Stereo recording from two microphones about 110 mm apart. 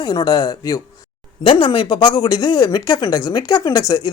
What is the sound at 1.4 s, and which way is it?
Speech, 50° left (ahead or behind).